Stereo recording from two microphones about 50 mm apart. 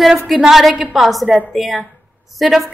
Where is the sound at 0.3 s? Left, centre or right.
Centre.